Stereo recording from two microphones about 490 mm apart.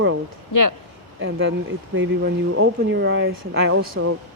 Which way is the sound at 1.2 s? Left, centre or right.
Right.